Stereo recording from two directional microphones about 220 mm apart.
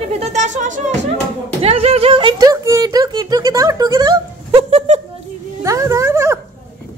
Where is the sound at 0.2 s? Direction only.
30° right (ahead or behind).